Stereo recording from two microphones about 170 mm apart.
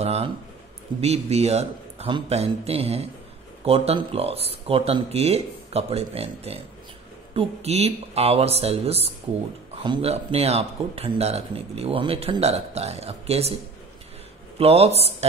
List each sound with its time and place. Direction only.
0.0 s speech: 40° right (ahead or behind)
14.6 s speech: 35° right (ahead or behind)